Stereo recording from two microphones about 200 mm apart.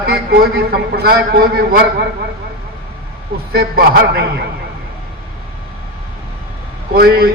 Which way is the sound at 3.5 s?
50° right (ahead or behind).